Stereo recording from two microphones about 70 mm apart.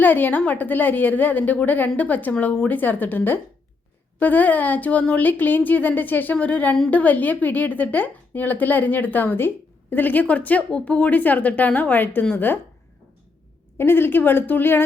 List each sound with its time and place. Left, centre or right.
0.0 s a woman's voice: left
13.7 s a woman's voice: left